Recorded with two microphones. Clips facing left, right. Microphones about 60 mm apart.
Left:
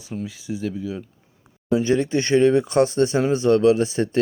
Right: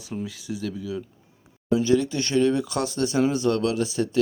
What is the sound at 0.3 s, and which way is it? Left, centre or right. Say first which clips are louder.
Speech: left 3 dB; left.